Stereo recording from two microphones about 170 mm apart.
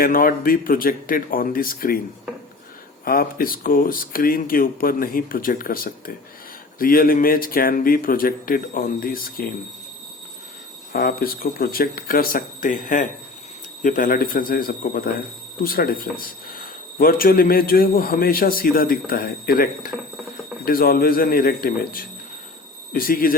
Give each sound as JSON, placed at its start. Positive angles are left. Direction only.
{"t": 0.0, "sound": "speech", "side_deg": 55}
{"t": 3.0, "sound": "speech", "side_deg": 60}
{"t": 10.9, "sound": "speech", "side_deg": 55}